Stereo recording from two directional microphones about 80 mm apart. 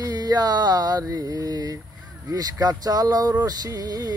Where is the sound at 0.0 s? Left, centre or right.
Right.